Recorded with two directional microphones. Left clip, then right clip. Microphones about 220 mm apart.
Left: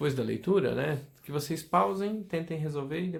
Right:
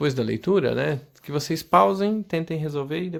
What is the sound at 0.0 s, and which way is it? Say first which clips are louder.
Speech: right 6 dB; 35° right (ahead or behind).